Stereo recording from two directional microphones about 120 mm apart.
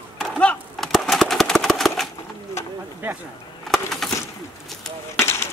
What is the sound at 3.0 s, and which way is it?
Speech, 15° right (ahead or behind).